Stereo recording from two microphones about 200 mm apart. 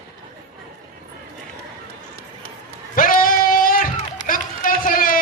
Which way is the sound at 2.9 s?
45° left (ahead or behind).